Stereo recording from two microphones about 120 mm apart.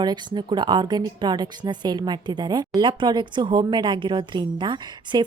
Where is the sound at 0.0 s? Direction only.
35° right (ahead or behind).